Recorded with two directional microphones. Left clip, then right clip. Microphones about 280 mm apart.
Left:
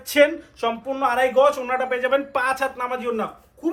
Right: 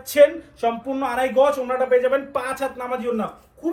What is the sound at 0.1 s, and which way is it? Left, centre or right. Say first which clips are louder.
Speech: right 2 dB; left.